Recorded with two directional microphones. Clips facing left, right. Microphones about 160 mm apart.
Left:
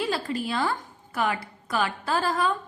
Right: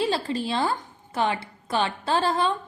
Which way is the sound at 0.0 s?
30° right (ahead or behind).